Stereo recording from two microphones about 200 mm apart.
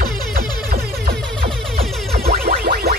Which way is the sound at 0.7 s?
50° right (ahead or behind).